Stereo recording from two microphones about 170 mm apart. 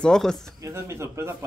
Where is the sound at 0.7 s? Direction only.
15° right (ahead or behind).